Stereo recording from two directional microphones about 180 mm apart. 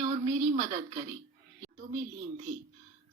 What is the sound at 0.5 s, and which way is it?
Speech, 35° right (ahead or behind).